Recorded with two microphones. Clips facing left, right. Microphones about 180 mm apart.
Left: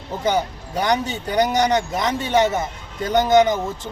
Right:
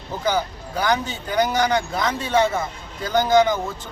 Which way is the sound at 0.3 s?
20° left (ahead or behind).